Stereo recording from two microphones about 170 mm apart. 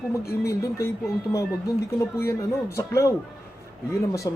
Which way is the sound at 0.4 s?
15° left (ahead or behind).